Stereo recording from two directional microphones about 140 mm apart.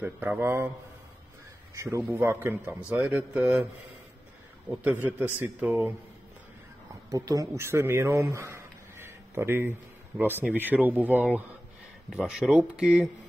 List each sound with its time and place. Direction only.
0.0 s speech: 15° right (ahead or behind)
1.8 s a man's voice: 20° right (ahead or behind)
5.0 s speech: 10° right (ahead or behind)
7.1 s speech: 25° right (ahead or behind); by 13.1 s 5° right (ahead or behind)